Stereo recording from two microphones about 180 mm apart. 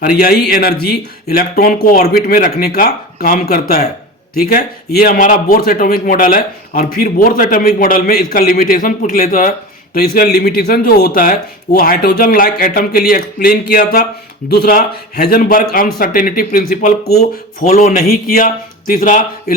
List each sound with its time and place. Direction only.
0.0 s a man's voice: 55° left (ahead or behind)
17.7 s speech: 45° left (ahead or behind)